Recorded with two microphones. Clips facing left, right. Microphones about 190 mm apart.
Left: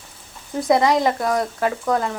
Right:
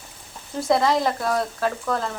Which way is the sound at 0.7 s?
15° left (ahead or behind).